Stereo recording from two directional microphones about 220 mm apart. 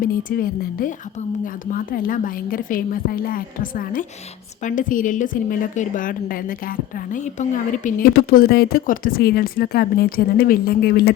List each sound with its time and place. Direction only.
0.3 s a woman's voice: 40° left (ahead or behind)